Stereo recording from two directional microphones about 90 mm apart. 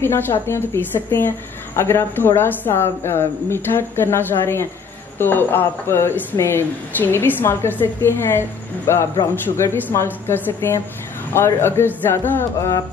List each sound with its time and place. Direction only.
0.0 s speech: 30° left (ahead or behind)